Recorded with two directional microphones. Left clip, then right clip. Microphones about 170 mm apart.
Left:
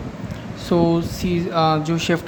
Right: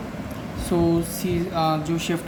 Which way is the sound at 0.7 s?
55° left (ahead or behind).